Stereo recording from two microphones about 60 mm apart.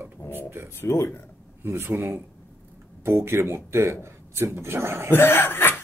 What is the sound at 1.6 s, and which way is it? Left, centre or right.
Speech, right.